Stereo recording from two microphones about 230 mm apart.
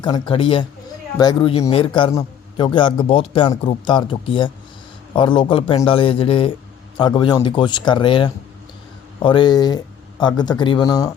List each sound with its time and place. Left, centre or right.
0.0 s a man's voice: left